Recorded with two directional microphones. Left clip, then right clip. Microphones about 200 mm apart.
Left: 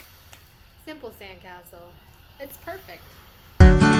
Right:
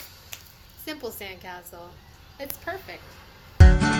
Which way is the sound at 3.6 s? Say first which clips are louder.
Left 5 dB; centre (ahead or behind).